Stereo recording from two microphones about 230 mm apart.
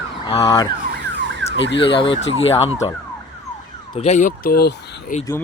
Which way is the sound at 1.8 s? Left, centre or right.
Left.